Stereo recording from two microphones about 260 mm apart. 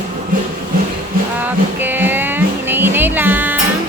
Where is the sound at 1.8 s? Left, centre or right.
Centre.